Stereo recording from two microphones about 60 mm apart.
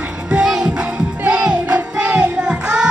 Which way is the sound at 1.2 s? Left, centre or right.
Centre.